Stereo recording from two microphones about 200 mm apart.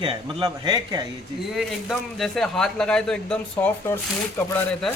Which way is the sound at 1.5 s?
Centre (ahead or behind).